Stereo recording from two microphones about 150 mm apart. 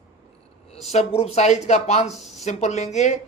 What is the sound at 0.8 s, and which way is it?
Speech, 45° left (ahead or behind).